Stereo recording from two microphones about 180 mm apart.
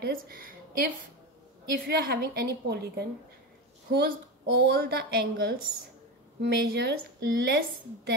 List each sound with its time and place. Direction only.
0.0 s a woman's voice: 50° right (ahead or behind)
1.9 s a woman's voice: 60° right (ahead or behind)